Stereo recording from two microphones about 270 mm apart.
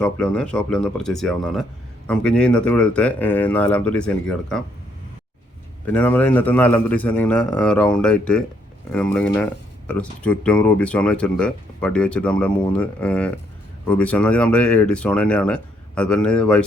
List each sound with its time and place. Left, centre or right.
0.0 s speech: centre
5.8 s speech: centre